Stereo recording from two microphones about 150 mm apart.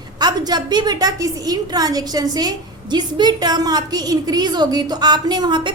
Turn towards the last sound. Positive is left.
turn(degrees=-30)  # may be behind; listen again after turning